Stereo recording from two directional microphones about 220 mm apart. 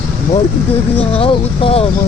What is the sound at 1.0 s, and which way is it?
Speech, 25° left (ahead or behind).